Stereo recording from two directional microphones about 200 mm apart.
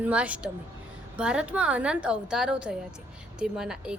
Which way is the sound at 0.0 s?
5° right (ahead or behind).